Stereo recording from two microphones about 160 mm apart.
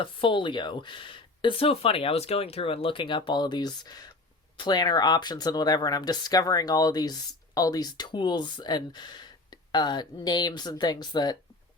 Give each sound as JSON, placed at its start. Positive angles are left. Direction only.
{"t": 0.0, "sound": "speech", "side_deg": 30}